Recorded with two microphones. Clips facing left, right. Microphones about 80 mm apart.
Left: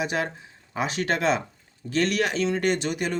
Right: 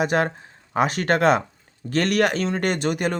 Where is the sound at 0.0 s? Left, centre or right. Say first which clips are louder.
Right 6 dB; right.